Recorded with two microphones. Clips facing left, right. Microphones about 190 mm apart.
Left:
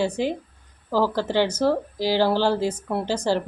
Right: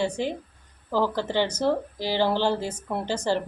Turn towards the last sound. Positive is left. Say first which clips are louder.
# left 3 dB
turn(degrees=10)  # may be behind; listen again after turning